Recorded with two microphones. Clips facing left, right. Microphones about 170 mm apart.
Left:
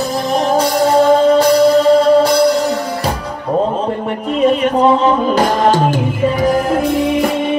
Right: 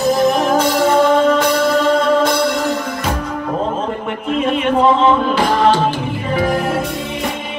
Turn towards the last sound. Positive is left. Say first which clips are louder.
# left 1 dB
turn(degrees=45)  # may be behind; listen again after turning